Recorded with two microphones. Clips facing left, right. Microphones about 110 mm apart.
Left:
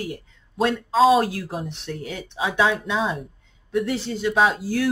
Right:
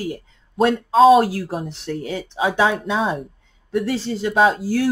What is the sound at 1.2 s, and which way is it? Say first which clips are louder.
Speech: right 4 dB; 35° right (ahead or behind).